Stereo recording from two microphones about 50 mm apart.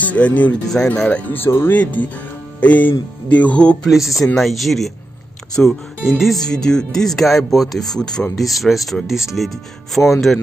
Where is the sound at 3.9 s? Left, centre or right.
Centre.